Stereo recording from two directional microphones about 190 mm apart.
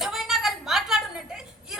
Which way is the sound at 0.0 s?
Centre (ahead or behind).